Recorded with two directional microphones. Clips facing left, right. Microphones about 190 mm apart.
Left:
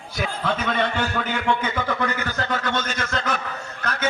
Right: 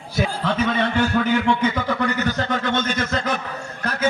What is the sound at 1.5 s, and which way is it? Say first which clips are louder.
Speech: right 3 dB; 15° right (ahead or behind).